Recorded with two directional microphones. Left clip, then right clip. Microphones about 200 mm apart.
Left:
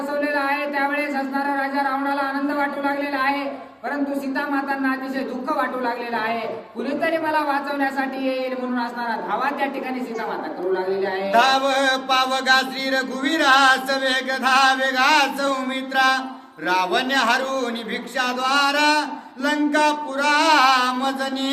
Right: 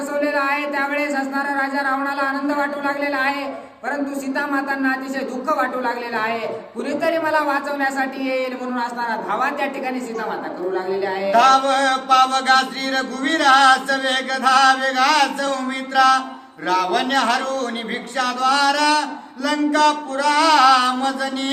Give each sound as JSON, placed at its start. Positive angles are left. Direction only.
{"t": 0.2, "sound": "speech", "side_deg": -15}
{"t": 4.4, "sound": "speech", "side_deg": -15}
{"t": 11.3, "sound": "chant", "side_deg": 20}